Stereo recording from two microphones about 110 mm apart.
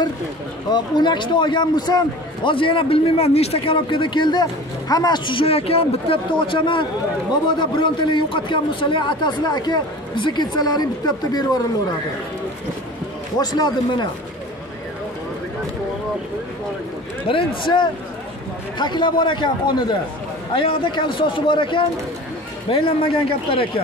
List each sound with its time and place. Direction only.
0.7 s a man's voice: 45° left (ahead or behind)
13.4 s a man's voice: 40° left (ahead or behind)
17.3 s a man's voice: 50° left (ahead or behind)